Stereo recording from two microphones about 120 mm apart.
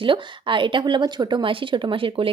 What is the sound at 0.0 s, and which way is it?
A woman's voice, 45° right (ahead or behind).